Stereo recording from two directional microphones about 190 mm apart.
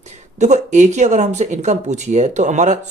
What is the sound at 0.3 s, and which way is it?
Speech, 40° right (ahead or behind).